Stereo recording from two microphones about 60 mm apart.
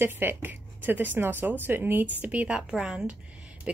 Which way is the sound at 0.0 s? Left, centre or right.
Right.